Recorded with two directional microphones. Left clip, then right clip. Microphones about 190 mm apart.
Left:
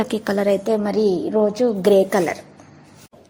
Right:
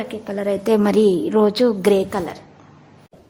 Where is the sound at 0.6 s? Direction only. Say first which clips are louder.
Right 3 dB; 25° right (ahead or behind).